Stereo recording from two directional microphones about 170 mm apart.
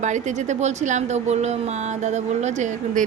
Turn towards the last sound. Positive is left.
turn(degrees=-45)  # may be behind; listen again after turning